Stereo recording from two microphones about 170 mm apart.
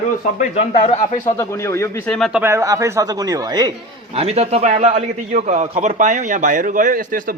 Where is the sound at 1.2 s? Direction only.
15° left (ahead or behind).